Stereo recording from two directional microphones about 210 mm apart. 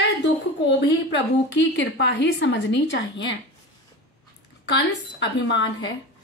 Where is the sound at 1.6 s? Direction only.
55° left (ahead or behind).